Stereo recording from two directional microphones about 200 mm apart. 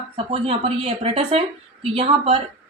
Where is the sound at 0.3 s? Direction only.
25° right (ahead or behind).